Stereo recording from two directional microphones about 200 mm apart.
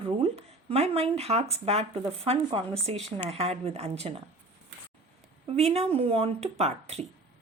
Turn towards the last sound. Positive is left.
turn(degrees=-30)  # may be behind; listen again after turning